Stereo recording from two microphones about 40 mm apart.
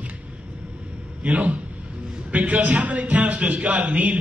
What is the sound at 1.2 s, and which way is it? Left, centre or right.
A man's voice, right.